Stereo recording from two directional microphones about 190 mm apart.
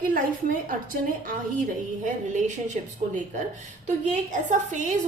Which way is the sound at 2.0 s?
40° right (ahead or behind).